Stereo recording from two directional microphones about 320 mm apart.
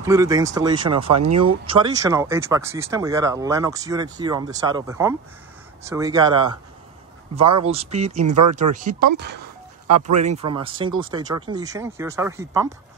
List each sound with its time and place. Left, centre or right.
0.0 s speech: centre
1.1 s speech: right
1.7 s speech: centre
7.6 s speech: centre
10.1 s speech: right